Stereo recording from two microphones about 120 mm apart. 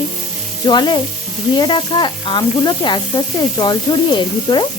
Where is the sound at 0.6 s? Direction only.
35° left (ahead or behind).